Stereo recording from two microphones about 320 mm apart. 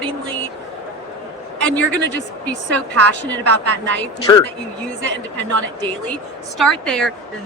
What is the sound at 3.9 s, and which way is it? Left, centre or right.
Speech, centre.